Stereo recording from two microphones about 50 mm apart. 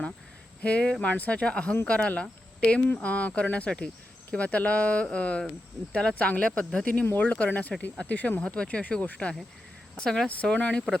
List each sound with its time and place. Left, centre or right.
0.6 s speech: left
6.1 s speech: left
7.0 s speech: left
10.0 s speech: centre
10.4 s speech: left